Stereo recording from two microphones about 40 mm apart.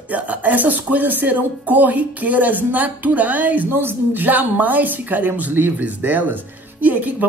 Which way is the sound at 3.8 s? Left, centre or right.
Right.